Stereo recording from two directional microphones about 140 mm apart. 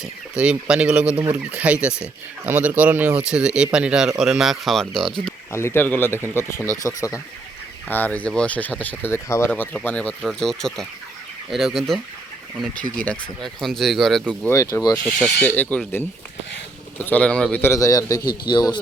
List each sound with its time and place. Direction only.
0.0 s speech: 5° right (ahead or behind)
5.5 s speech: 20° left (ahead or behind)
7.9 s speech: 10° left (ahead or behind)
14.5 s a man's voice: 25° left (ahead or behind)
14.9 s speech: 10° left (ahead or behind)
17.1 s a man's voice: 10° left (ahead or behind); by 18.8 s 35° left (ahead or behind)